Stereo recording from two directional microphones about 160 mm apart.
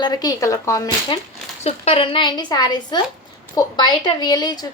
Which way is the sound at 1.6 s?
40° left (ahead or behind).